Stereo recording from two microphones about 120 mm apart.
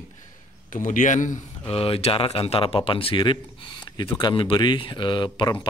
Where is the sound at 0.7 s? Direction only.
90° left.